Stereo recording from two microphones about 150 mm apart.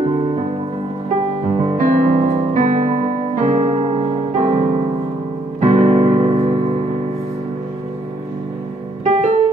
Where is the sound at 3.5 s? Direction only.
35° right (ahead or behind).